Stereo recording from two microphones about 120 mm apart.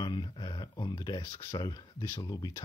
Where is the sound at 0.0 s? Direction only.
40° left (ahead or behind).